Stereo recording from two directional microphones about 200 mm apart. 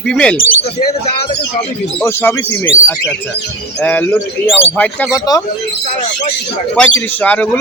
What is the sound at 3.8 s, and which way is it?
A man's voice, 10° left (ahead or behind).